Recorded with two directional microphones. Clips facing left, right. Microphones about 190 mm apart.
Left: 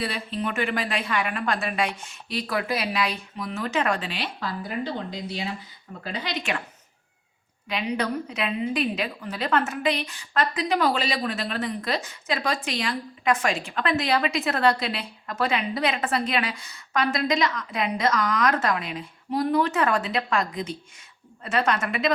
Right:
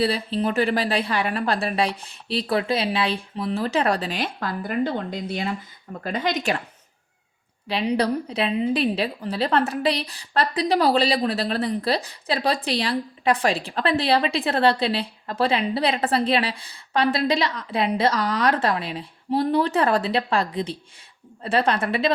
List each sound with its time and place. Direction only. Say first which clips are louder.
0.0 s a woman's voice: right 6 dB; 35° right (ahead or behind)
7.7 s a woman's voice: right 5 dB; 35° right (ahead or behind)